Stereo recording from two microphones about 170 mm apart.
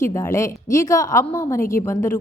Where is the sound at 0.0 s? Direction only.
15° left (ahead or behind).